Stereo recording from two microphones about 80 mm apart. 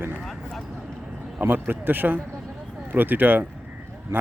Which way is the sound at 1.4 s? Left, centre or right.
Right.